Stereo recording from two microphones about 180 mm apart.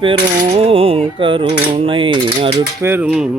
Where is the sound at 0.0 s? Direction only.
30° right (ahead or behind).